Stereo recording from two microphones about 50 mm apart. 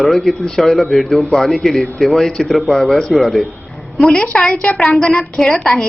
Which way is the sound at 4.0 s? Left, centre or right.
Centre.